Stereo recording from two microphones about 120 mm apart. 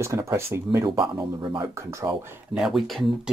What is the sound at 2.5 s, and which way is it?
Speech, 5° right (ahead or behind).